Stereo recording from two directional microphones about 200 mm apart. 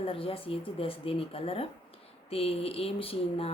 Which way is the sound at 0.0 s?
25° left (ahead or behind).